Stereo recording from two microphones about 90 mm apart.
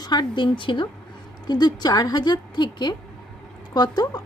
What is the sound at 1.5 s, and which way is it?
A woman's voice, 50° left (ahead or behind).